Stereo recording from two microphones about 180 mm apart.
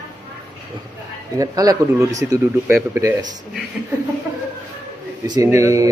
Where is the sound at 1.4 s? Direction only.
20° right (ahead or behind).